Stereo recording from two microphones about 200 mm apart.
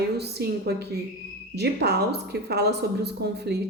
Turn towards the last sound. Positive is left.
turn(degrees=-55)  # may be behind; listen again after turning